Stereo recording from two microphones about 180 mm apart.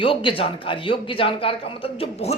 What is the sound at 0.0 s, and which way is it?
Speech, 30° left (ahead or behind).